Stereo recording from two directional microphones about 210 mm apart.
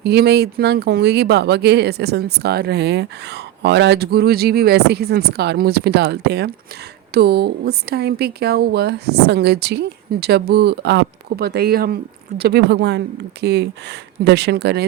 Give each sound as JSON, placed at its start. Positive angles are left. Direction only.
{"t": 0.0, "sound": "speech", "side_deg": -50}